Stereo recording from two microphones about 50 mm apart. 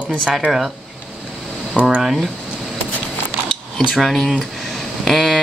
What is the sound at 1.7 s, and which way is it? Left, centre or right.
Speech, right.